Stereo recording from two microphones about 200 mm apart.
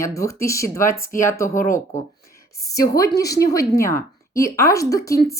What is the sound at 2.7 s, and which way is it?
Speech, 15° left (ahead or behind).